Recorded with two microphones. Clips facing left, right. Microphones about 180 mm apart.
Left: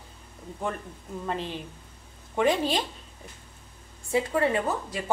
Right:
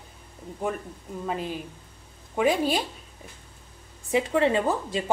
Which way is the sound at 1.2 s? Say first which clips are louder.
Right 2 dB; 5° right (ahead or behind).